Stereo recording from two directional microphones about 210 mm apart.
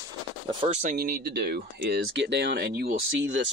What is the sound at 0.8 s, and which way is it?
Speech, 45° right (ahead or behind).